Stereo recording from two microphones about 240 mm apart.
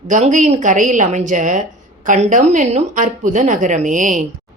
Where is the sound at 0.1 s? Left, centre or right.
Right.